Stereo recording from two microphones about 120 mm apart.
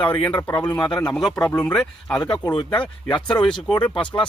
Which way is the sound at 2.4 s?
40° left (ahead or behind).